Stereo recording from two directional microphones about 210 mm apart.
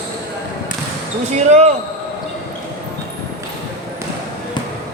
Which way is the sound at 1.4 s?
35° right (ahead or behind).